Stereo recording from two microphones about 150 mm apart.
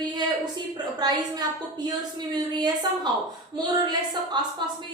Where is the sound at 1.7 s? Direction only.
25° right (ahead or behind).